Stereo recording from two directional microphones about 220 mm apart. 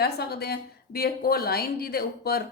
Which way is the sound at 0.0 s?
45° left (ahead or behind).